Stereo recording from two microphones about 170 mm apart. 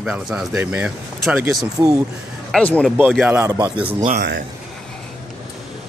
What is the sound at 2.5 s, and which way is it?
Speech, 5° left (ahead or behind).